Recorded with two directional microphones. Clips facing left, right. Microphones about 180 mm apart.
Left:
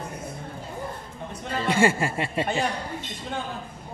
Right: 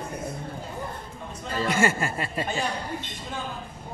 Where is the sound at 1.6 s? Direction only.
30° left (ahead or behind).